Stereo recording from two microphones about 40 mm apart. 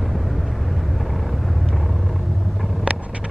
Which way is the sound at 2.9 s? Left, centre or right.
Right.